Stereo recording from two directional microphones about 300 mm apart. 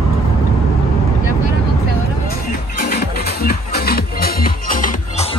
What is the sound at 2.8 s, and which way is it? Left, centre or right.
Music, left.